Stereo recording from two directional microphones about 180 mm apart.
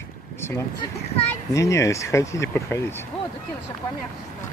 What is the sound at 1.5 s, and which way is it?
Speech, 15° left (ahead or behind).